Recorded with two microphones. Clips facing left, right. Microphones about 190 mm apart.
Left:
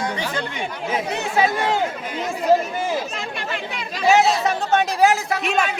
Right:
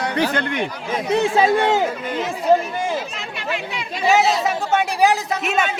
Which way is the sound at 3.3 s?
50° left (ahead or behind).